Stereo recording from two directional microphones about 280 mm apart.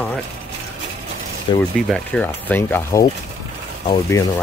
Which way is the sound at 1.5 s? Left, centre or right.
Centre.